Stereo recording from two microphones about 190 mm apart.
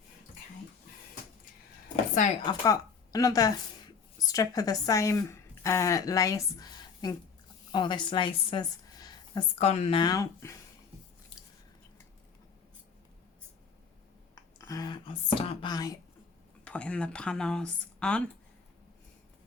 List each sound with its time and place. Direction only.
2.5 s a woman's voice: 20° left (ahead or behind)
9.6 s speech: 35° left (ahead or behind); by 10.5 s 20° left (ahead or behind)
14.6 s whispering: 20° left (ahead or behind)
16.6 s speech: 5° left (ahead or behind)